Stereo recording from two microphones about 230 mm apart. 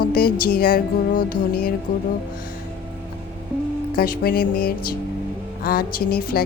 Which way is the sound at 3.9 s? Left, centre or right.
Left.